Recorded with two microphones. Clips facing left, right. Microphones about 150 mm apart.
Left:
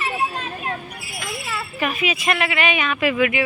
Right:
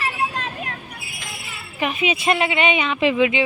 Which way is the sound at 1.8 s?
25° right (ahead or behind).